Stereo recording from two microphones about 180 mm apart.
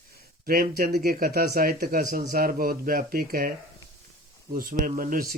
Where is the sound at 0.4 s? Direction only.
55° right (ahead or behind).